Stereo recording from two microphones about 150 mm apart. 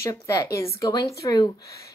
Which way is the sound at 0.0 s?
20° left (ahead or behind).